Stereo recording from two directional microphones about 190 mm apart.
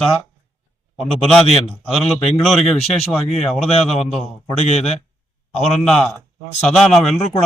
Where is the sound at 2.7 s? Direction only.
30° left (ahead or behind).